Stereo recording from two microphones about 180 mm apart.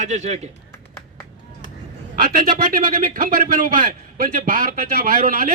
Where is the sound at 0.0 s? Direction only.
40° right (ahead or behind).